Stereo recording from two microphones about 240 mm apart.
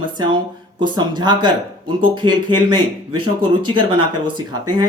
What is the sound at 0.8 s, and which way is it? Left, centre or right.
Speech, centre.